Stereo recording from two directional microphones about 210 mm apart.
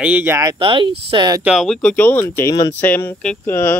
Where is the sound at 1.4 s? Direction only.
Centre (ahead or behind).